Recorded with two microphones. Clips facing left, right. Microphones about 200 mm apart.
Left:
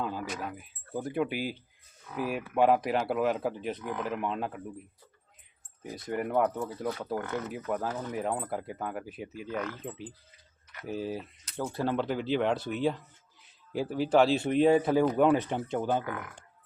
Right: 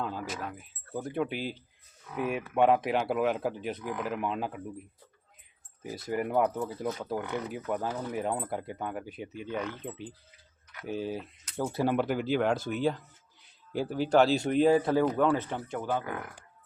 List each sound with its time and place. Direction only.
0.0 s speech: 5° left (ahead or behind)
5.8 s speech: centre (ahead or behind)
11.5 s speech: 10° right (ahead or behind); by 16.4 s 25° left (ahead or behind)